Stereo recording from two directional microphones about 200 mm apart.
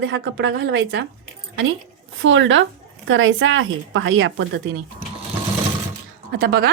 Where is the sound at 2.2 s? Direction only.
70° right (ahead or behind).